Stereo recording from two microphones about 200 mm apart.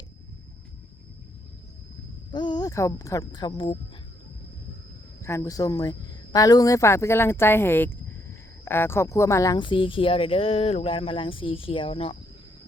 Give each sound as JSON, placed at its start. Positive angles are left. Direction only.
{"t": 2.3, "sound": "speech", "side_deg": 20}
{"t": 5.2, "sound": "speech", "side_deg": 15}